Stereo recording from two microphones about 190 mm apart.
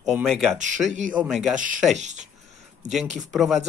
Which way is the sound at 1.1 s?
5° right (ahead or behind).